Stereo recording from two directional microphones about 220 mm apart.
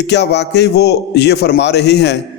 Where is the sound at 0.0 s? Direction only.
50° left (ahead or behind).